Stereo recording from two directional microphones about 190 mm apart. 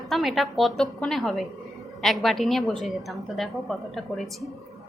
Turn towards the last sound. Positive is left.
turn(degrees=0)  # may be behind; listen again after turning